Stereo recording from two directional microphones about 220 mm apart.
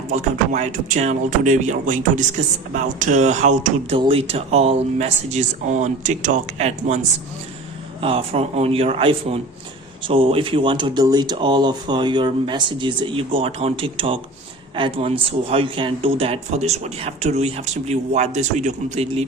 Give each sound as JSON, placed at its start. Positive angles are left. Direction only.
{"t": 0.1, "sound": "speech", "side_deg": -35}
{"t": 8.0, "sound": "speech", "side_deg": -25}